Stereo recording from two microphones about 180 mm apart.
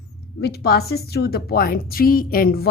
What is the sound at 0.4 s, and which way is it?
A woman's voice, 60° left (ahead or behind).